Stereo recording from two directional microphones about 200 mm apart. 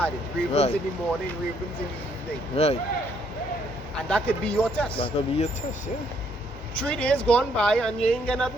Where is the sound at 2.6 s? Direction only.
30° left (ahead or behind).